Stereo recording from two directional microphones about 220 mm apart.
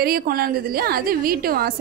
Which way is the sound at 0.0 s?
40° right (ahead or behind).